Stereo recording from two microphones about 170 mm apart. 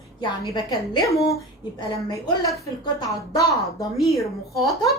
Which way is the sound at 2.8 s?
20° left (ahead or behind).